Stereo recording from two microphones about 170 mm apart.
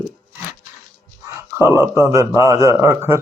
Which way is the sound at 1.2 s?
15° right (ahead or behind).